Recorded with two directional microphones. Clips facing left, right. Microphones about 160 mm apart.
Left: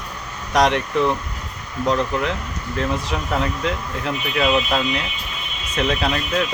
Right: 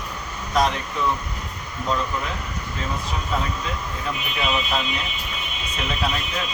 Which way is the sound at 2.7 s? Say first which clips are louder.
Left 7 dB; 70° left (ahead or behind).